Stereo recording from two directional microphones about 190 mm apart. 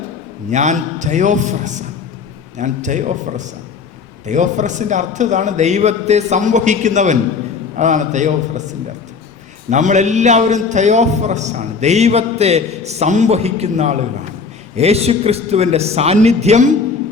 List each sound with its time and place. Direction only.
0.5 s a man's voice: 40° right (ahead or behind)
9.6 s a man's voice: 40° right (ahead or behind)